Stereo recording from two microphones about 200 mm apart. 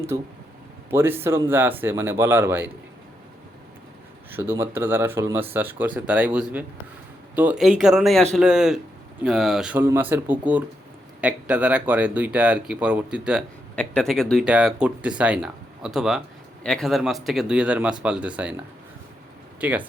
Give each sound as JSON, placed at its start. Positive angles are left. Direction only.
{"t": 0.1, "sound": "speech", "side_deg": -15}
{"t": 4.3, "sound": "speech", "side_deg": -10}